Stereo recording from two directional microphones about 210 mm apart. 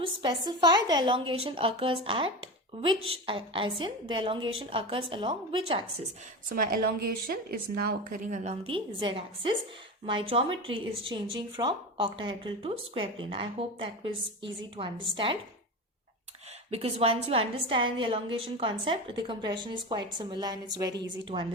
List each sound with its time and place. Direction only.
0.0 s speech: 20° right (ahead or behind)
6.5 s a woman's voice: 45° right (ahead or behind); by 15.4 s 25° right (ahead or behind)
16.7 s speech: 30° right (ahead or behind)